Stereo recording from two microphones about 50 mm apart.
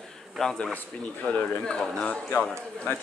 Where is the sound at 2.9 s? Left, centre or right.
Left.